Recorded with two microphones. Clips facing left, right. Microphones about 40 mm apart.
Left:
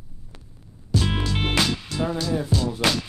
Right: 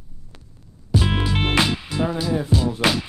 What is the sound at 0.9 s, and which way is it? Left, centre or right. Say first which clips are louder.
Music: right 3 dB; centre.